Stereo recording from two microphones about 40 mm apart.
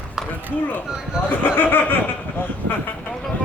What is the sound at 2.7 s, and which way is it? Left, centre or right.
Vehicle, left.